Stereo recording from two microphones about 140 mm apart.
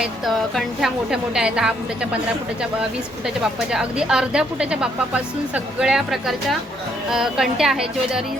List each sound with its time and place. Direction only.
0.0 s a woman's voice: centre (ahead or behind)
3.2 s a woman's voice: 5° right (ahead or behind)